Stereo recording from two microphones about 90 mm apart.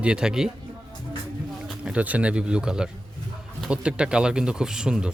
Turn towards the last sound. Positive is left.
turn(degrees=-10)  # may be behind; listen again after turning